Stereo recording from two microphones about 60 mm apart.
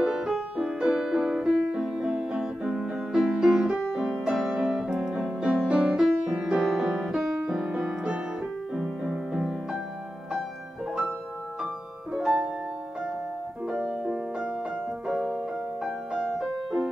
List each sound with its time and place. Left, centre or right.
0.0 s music: centre
8.7 s music: centre
9.1 s music: centre
12.1 s piano: centre
13.7 s music: centre
15.8 s music: centre